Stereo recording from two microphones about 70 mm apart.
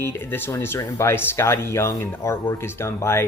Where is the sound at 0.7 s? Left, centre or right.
Left.